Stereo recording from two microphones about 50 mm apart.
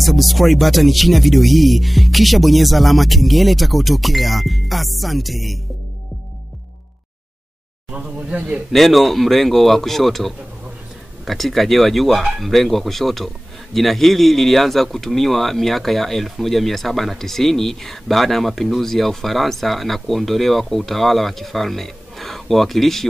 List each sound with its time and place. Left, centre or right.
0.0 s speech: centre
7.9 s speech: right
8.7 s speech: centre